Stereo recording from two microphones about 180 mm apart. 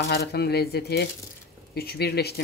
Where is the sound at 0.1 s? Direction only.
60° left (ahead or behind).